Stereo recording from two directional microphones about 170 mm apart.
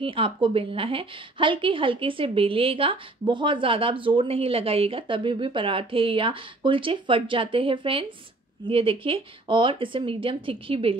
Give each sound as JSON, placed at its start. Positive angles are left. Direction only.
{"t": 0.0, "sound": "a woman's voice", "side_deg": -30}